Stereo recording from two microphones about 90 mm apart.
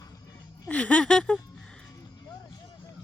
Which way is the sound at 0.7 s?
15° left (ahead or behind).